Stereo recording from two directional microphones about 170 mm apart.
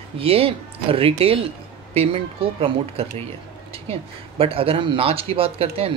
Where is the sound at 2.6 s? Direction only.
35° right (ahead or behind).